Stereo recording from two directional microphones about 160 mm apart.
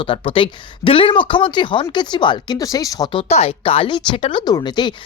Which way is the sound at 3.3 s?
40° left (ahead or behind).